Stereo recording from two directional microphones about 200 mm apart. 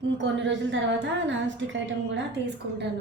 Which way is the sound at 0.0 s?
65° right (ahead or behind).